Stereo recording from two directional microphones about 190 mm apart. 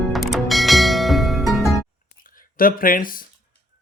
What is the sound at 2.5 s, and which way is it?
Speech, 50° left (ahead or behind).